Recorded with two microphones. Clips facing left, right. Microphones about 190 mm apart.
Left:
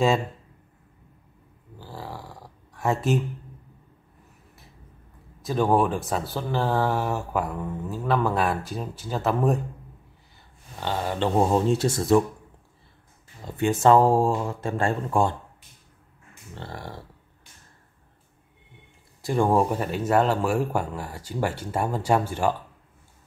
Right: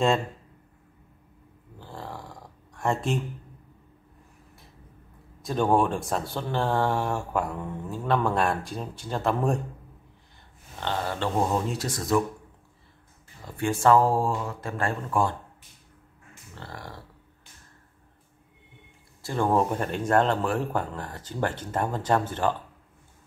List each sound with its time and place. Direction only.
1.8 s a sound: 5° left (ahead or behind)
5.4 s speech: centre (ahead or behind)
10.8 s speech: 10° left (ahead or behind)
11.3 s speech: 30° left (ahead or behind)
13.4 s speech: 20° left (ahead or behind)
16.5 s speech: 25° left (ahead or behind)
19.2 s speech: 15° left (ahead or behind)